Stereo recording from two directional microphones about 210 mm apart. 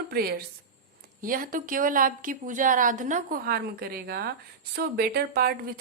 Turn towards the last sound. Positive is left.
turn(degrees=-45)  # may be behind; listen again after turning